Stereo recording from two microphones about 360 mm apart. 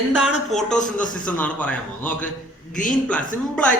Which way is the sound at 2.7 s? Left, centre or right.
Left.